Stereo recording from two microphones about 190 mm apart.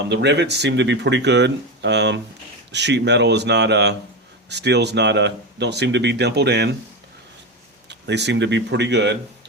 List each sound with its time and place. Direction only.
0.1 s speech: 65° right (ahead or behind)
7.9 s speech: 65° right (ahead or behind)